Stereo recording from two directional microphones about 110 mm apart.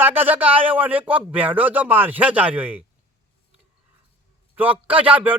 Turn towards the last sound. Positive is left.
turn(degrees=-15)  # may be behind; listen again after turning